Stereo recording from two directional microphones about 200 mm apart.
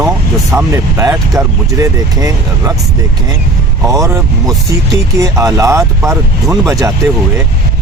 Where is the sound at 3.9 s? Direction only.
15° right (ahead or behind).